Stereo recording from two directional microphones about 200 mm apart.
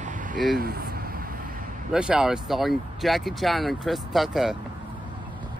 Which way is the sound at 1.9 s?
5° right (ahead or behind).